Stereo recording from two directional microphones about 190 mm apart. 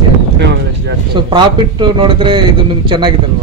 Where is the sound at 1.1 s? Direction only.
25° right (ahead or behind).